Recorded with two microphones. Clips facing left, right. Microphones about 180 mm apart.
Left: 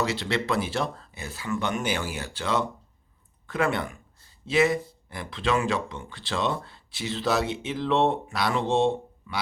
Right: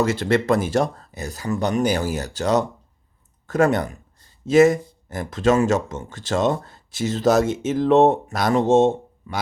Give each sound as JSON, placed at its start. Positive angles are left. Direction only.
{"t": 0.0, "sound": "speech", "side_deg": -50}